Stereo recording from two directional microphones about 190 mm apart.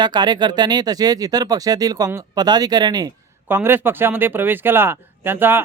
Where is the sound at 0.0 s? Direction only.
25° right (ahead or behind).